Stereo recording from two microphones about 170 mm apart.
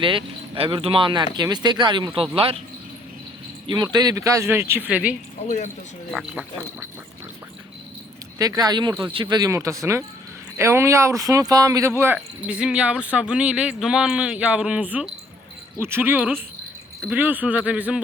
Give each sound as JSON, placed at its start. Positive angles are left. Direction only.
{"t": 0.0, "sound": "speech", "side_deg": -30}
{"t": 3.7, "sound": "speech", "side_deg": -25}
{"t": 5.4, "sound": "speech", "side_deg": 45}
{"t": 6.1, "sound": "speech", "side_deg": 0}
{"t": 8.4, "sound": "speech", "side_deg": -20}